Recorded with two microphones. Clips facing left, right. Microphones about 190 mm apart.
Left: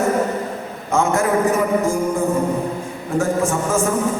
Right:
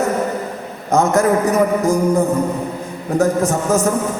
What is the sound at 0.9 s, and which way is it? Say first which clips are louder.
A man's voice: right 4 dB; 40° right (ahead or behind).